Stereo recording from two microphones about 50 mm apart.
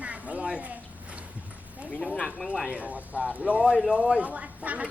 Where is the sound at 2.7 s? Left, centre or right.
Right.